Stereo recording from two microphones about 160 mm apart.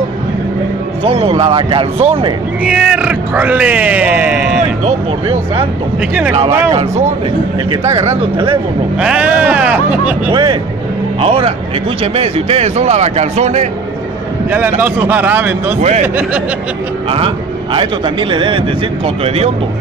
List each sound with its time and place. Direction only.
1.0 s speech: 40° right (ahead or behind)
2.6 s speech: 5° right (ahead or behind)
6.7 s speech: 45° right (ahead or behind)
8.0 s speech: 20° right (ahead or behind)
9.0 s speech: 5° right (ahead or behind)
10.3 s speech: 30° right (ahead or behind); by 13.7 s 45° right (ahead or behind)
14.5 s speech: 10° right (ahead or behind)
17.7 s speech: 30° right (ahead or behind)